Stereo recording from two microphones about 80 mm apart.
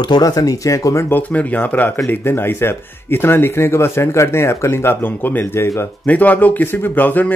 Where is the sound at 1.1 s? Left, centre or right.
Centre.